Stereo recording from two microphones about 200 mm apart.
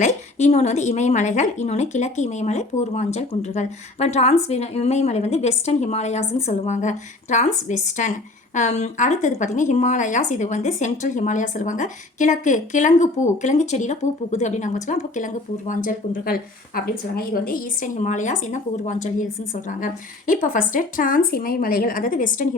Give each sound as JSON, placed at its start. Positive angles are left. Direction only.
{"t": 0.0, "sound": "a woman's voice", "side_deg": 35}